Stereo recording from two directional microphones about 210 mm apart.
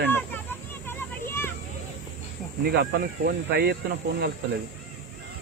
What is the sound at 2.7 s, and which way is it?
Speech, 50° right (ahead or behind).